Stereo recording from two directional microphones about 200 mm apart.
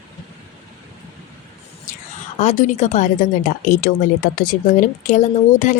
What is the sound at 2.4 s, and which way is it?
A woman's voice, 40° left (ahead or behind).